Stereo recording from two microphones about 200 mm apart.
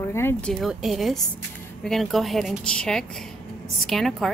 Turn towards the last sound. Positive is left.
turn(degrees=0)  # may be behind; listen again after turning